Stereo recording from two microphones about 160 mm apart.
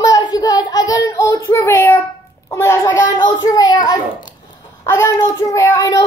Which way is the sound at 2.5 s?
15° left (ahead or behind).